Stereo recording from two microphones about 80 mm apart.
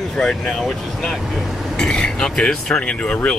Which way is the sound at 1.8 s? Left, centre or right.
Centre.